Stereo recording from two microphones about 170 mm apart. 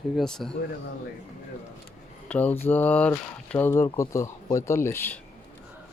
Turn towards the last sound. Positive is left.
turn(degrees=10)  # may be behind; listen again after turning